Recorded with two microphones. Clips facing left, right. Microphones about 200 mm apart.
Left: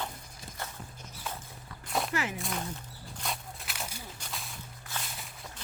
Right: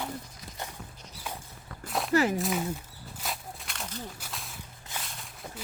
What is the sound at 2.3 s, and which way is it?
Speech, 5° right (ahead or behind).